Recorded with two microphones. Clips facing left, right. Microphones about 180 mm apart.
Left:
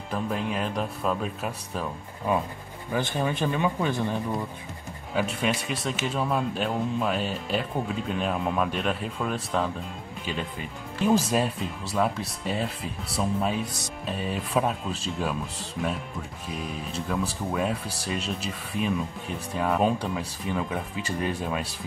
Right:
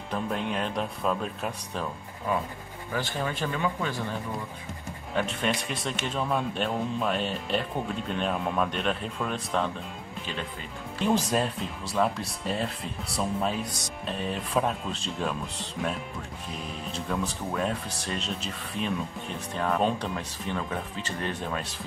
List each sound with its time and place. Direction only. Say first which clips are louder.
0.1 s a man's voice: left 1 dB; centre (ahead or behind)
2.9 s speech: left 4 dB; 15° left (ahead or behind)
5.1 s a man's voice: left 2 dB; 5° left (ahead or behind)
11.1 s a man's voice: left 2 dB; 5° left (ahead or behind)
13.7 s speech: even; 25° left (ahead or behind)
14.0 s a man's voice: left 1 dB; 5° left (ahead or behind)